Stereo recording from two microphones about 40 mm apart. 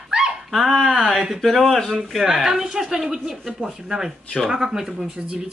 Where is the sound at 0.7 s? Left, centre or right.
Centre.